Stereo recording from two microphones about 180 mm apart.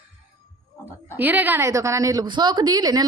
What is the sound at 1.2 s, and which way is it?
A woman's voice, 10° right (ahead or behind).